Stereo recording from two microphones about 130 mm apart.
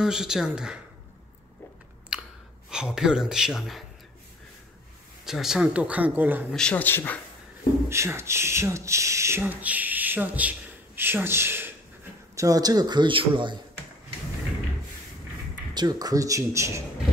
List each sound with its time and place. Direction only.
0.0 s speech: 5° right (ahead or behind)
2.1 s chewing: 5° right (ahead or behind)
2.7 s speech: 5° right (ahead or behind)
5.2 s speech: 5° right (ahead or behind)
6.5 s a man's voice: 10° left (ahead or behind)
7.9 s speech: 20° right (ahead or behind)
12.4 s a man's voice: 30° right (ahead or behind)
15.7 s speech: 30° right (ahead or behind)